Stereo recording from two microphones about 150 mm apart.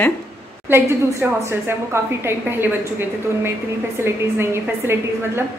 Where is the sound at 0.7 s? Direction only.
15° right (ahead or behind).